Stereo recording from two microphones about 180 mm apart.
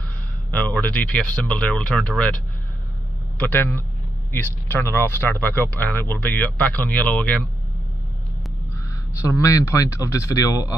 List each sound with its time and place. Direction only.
0.5 s speech: 5° left (ahead or behind)
9.2 s speech: 15° left (ahead or behind)